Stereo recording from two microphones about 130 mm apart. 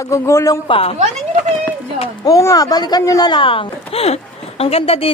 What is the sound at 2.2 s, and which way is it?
Speech, 25° left (ahead or behind).